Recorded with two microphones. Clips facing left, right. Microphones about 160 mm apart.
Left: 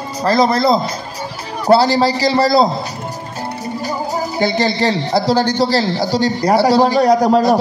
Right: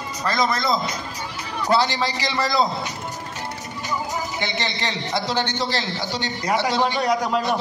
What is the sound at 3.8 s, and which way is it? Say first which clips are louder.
Speech: left 5 dB; 35° left (ahead or behind).